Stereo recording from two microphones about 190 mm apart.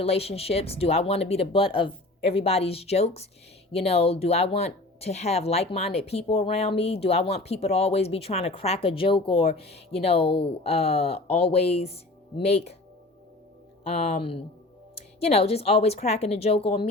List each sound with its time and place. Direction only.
0.0 s speech: 30° left (ahead or behind)
13.8 s speech: 35° left (ahead or behind)